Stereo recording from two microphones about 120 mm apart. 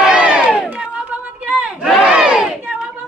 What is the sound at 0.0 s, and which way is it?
Crowd, 10° right (ahead or behind).